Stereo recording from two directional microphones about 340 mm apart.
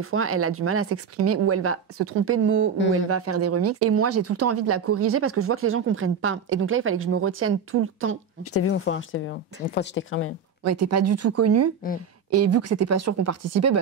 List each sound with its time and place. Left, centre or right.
0.0 s speech: right
8.5 s speech: left
10.6 s speech: right